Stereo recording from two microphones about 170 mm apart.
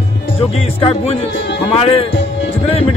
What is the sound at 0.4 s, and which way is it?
A man's voice, 35° left (ahead or behind).